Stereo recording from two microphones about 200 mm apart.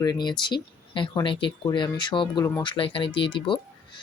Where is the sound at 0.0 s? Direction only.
20° left (ahead or behind).